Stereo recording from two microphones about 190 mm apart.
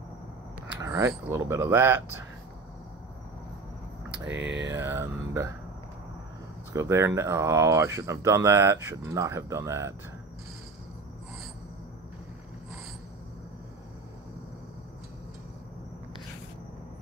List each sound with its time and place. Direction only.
0.7 s speech: 15° right (ahead or behind)
4.3 s a sound: 75° right (ahead or behind)
4.7 s speech: 15° right (ahead or behind)
6.7 s speech: 15° right (ahead or behind)